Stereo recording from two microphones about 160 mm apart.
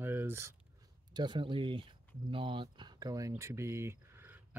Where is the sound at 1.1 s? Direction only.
30° right (ahead or behind).